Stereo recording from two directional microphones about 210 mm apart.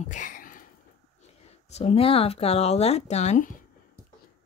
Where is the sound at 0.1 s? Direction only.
40° left (ahead or behind).